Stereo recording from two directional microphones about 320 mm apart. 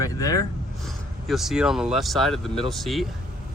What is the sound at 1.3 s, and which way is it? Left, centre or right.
Speech, centre.